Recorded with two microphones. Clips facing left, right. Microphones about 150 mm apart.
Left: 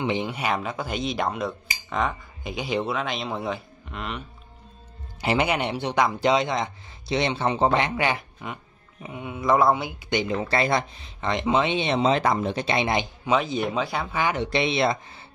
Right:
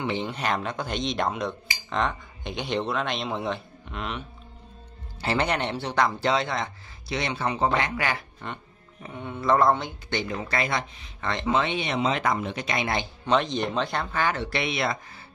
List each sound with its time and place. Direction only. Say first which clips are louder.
0.0 s speech: left 2 dB; 15° left (ahead or behind)
5.2 s a man's voice: left 2 dB; 15° left (ahead or behind)
8.4 s a man's voice: left 1 dB; 10° left (ahead or behind); by 10.9 s 35° left (ahead or behind)
11.1 s speech: left 2 dB; 20° left (ahead or behind)
13.3 s a man's voice: left 1 dB; 5° left (ahead or behind); by 15.0 s 25° left (ahead or behind)